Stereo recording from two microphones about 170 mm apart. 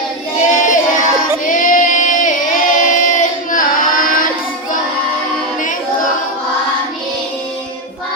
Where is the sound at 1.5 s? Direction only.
50° left (ahead or behind).